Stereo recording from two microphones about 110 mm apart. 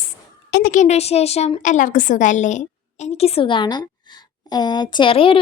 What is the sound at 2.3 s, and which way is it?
A woman's voice, 90° left.